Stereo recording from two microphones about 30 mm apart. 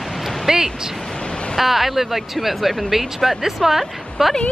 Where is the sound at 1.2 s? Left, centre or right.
Left.